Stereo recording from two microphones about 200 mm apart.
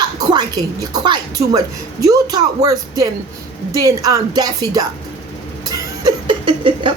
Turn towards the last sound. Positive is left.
turn(degrees=-25)  # may be behind; listen again after turning